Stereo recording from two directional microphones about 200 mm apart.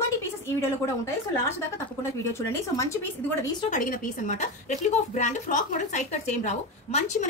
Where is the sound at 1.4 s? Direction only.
15° left (ahead or behind).